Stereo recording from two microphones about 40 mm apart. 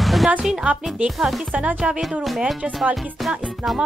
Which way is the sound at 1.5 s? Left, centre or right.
Right.